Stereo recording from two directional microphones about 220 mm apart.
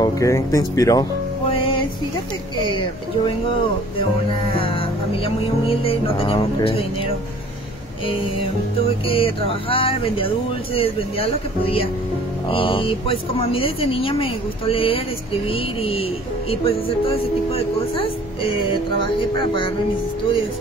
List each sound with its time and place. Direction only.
0.0 s speech: 15° left (ahead or behind)
1.5 s music: 25° left (ahead or behind)
2.7 s speech: 20° left (ahead or behind)
4.6 s speech: 25° left (ahead or behind)
8.7 s speech: 25° left (ahead or behind)